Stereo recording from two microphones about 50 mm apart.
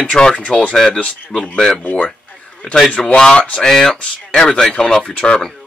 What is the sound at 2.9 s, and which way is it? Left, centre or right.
Speech, centre.